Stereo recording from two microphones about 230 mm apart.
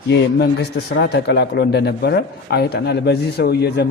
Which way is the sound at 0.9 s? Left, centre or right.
Left.